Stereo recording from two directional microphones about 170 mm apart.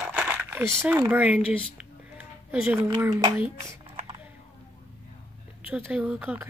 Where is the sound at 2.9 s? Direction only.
20° right (ahead or behind).